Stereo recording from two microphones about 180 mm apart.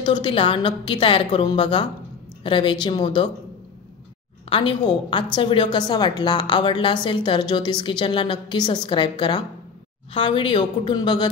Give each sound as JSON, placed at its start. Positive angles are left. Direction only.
{"t": 0.0, "sound": "a woman's voice", "side_deg": 25}
{"t": 4.5, "sound": "a woman's voice", "side_deg": 30}